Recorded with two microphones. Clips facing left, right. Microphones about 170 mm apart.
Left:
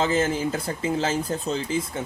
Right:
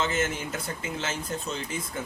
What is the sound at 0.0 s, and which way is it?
Speech, 35° left (ahead or behind).